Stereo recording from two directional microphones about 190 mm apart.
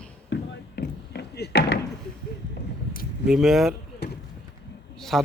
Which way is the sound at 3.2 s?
Centre (ahead or behind).